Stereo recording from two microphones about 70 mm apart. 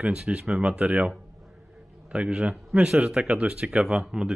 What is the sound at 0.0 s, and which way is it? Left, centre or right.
Speech, centre.